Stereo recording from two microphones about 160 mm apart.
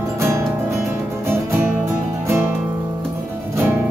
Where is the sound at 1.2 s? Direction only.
15° right (ahead or behind).